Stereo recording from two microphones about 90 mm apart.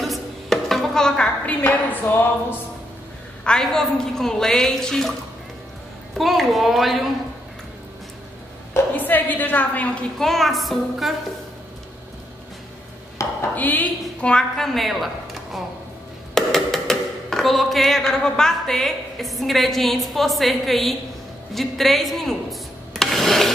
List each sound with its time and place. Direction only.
0.0 s a sound: centre (ahead or behind)
1.7 s speech: 20° left (ahead or behind)
3.4 s speech: 5° left (ahead or behind)
6.1 s speech: centre (ahead or behind)
8.9 s a woman's voice: 20° left (ahead or behind)
10.1 s speech: 5° left (ahead or behind)
13.2 s a sound: 35° left (ahead or behind)
13.6 s a woman's voice: 20° left (ahead or behind); by 15.0 s centre (ahead or behind)
16.3 s music: 5° left (ahead or behind)
21.5 s speech: centre (ahead or behind)